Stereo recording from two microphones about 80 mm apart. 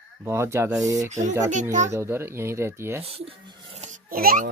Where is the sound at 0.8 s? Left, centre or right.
Right.